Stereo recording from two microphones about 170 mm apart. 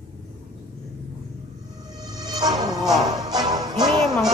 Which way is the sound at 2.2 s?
20° right (ahead or behind).